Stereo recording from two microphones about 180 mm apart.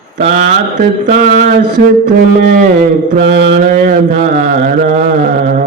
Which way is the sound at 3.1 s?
90° right.